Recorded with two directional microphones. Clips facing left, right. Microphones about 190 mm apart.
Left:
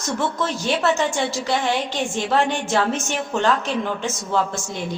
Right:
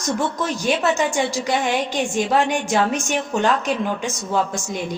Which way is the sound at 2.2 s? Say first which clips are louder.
Right 1 dB; 15° right (ahead or behind).